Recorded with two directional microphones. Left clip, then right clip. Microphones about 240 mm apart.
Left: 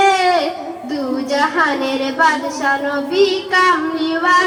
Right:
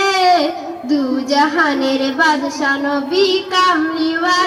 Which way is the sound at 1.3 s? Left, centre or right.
Right.